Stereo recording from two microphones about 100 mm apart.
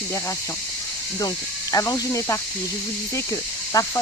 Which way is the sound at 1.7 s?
35° left (ahead or behind).